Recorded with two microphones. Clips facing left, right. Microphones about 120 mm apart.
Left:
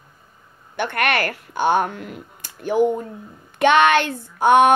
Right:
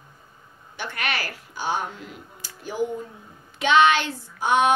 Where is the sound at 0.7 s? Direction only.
60° left (ahead or behind).